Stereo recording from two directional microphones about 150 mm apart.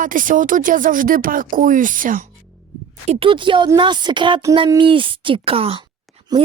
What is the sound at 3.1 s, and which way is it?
Speech, 35° right (ahead or behind).